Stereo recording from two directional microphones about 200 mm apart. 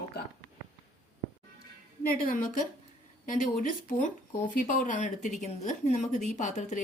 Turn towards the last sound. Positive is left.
turn(degrees=35)  # may be behind; listen again after turning